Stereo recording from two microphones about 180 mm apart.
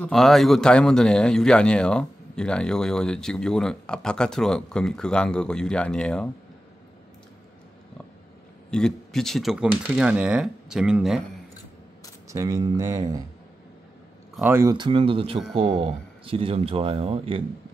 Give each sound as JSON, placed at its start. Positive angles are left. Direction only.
{"t": 0.0, "sound": "speech", "side_deg": 0}
{"t": 8.6, "sound": "speech", "side_deg": 5}
{"t": 12.3, "sound": "speech", "side_deg": -20}
{"t": 14.3, "sound": "speech", "side_deg": -10}